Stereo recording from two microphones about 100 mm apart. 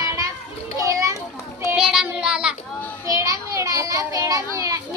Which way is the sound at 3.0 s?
35° right (ahead or behind).